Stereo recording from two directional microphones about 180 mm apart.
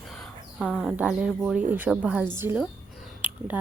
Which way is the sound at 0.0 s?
Centre (ahead or behind).